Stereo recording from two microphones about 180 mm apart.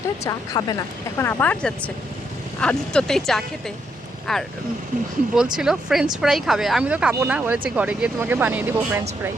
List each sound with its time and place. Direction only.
0.3 s speech: 20° left (ahead or behind)
1.2 s speech: 10° left (ahead or behind)
5.5 s speech: 5° right (ahead or behind)